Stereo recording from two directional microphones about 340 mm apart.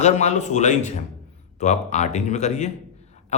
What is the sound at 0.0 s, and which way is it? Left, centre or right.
A man's voice, centre.